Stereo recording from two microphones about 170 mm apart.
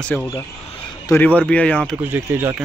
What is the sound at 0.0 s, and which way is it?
Speech, 10° left (ahead or behind).